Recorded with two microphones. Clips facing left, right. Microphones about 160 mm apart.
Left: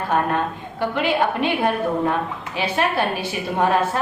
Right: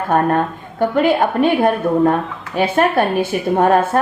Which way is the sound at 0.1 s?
45° right (ahead or behind).